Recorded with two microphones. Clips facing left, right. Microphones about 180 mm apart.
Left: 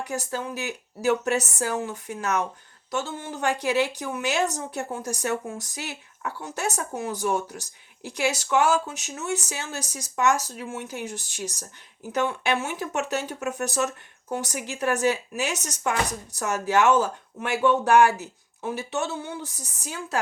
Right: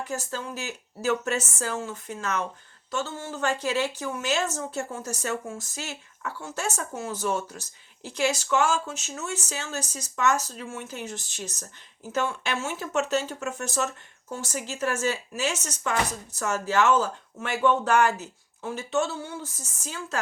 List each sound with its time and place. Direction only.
0.0 s speech: 15° left (ahead or behind)